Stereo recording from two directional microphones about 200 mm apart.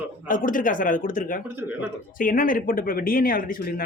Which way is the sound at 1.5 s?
10° right (ahead or behind).